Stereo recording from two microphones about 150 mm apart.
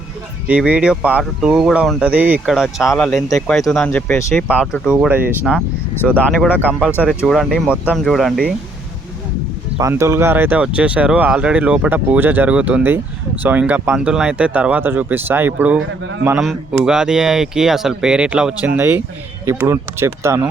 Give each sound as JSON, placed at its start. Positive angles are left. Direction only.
{"t": 0.4, "sound": "speech", "side_deg": -10}
{"t": 4.4, "sound": "speech", "side_deg": -10}
{"t": 7.3, "sound": "speech", "side_deg": 0}
{"t": 9.7, "sound": "speech", "side_deg": -20}
{"t": 16.8, "sound": "speech", "side_deg": -5}